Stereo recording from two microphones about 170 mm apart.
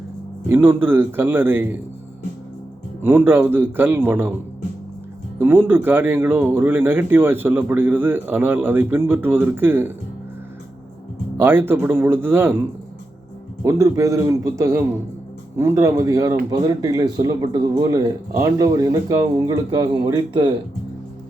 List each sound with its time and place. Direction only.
0.4 s speech: 15° right (ahead or behind)
3.0 s speech: 10° right (ahead or behind)
5.4 s speech: 10° right (ahead or behind)
11.3 s speech: 10° right (ahead or behind)
13.7 s speech: 20° right (ahead or behind)